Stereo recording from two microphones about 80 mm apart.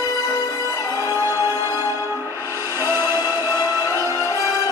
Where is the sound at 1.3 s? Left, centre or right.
Left.